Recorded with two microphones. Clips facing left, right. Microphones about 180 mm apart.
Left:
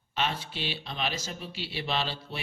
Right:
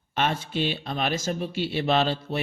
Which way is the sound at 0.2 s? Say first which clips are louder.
Right 6 dB; 50° right (ahead or behind).